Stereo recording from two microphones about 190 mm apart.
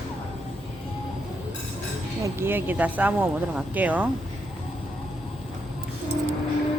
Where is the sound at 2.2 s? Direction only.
10° right (ahead or behind).